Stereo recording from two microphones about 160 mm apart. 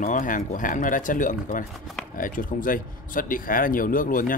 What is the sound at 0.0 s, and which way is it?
Speech, 55° left (ahead or behind).